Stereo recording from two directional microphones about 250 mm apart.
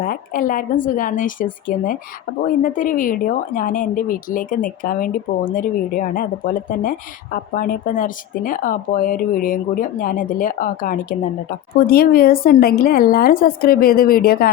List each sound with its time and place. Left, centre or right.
0.0 s a woman's voice: left